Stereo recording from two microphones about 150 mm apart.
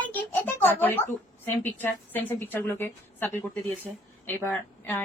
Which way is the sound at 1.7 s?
10° left (ahead or behind).